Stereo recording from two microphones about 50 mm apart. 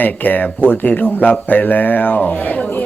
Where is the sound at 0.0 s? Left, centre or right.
Left.